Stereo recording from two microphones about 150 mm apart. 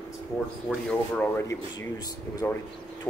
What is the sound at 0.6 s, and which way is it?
A woman's voice, 10° left (ahead or behind).